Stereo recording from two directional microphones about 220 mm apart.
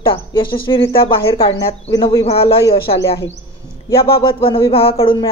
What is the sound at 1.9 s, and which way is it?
A woman's voice, 15° left (ahead or behind).